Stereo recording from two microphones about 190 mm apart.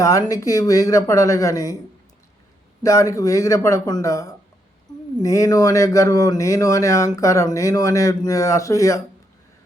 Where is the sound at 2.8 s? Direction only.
15° left (ahead or behind).